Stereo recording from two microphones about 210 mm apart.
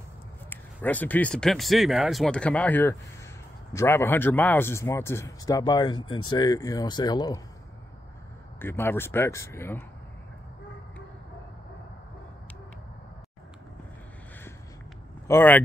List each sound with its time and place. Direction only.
0.5 s speech: 10° left (ahead or behind)
8.5 s speech: 10° left (ahead or behind)
15.2 s speech: 10° left (ahead or behind)